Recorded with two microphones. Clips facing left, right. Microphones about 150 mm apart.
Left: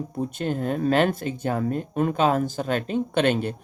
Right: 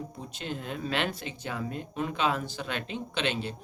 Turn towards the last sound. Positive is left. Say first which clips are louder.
# left 9 dB
turn(degrees=50)  # may be behind; listen again after turning